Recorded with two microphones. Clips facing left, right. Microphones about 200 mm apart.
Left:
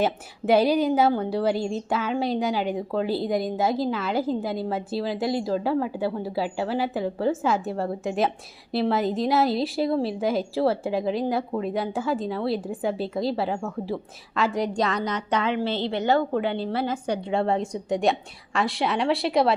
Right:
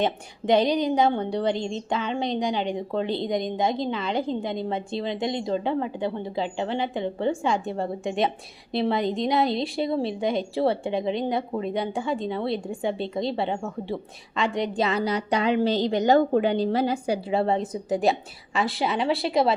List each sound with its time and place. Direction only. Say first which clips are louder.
0.0 s a woman's voice: left 1 dB; 5° left (ahead or behind); by 15.6 s 15° right (ahead or behind)
15.6 s a woman's voice: right 4 dB; 40° right (ahead or behind)
15.9 s a woman's voice: right 3 dB; 15° right (ahead or behind); by 19.5 s centre (ahead or behind)